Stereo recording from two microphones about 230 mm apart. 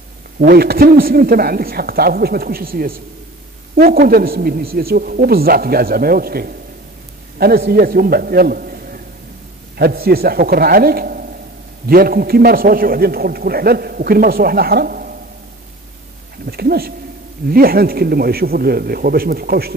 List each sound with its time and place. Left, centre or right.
0.4 s a man's voice: right
16.4 s a man's voice: right